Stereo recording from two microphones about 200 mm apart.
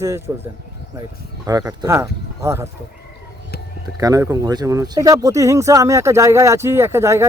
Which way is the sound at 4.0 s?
15° right (ahead or behind).